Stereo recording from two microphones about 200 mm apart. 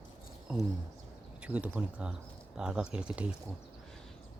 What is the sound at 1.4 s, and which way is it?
Speech, 5° right (ahead or behind).